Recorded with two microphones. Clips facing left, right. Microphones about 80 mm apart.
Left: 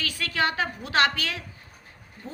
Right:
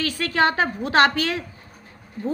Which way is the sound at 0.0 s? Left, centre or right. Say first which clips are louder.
Right 6 dB; right.